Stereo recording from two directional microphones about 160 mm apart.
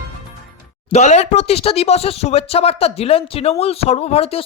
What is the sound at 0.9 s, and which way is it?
Speech, 45° left (ahead or behind).